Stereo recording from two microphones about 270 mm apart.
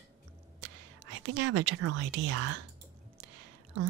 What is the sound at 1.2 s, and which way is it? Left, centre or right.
Speech, right.